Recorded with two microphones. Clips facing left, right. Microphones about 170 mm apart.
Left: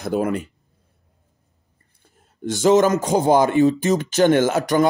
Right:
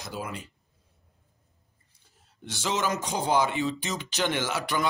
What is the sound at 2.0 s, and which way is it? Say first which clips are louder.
A man's voice: left 16 dB; 50° left (ahead or behind).